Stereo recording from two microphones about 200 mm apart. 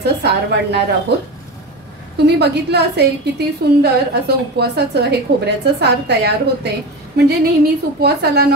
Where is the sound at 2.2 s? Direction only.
55° right (ahead or behind).